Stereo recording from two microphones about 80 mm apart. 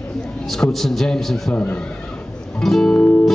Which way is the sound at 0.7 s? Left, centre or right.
Centre.